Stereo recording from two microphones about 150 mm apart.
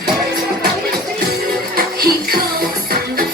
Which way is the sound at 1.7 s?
80° right.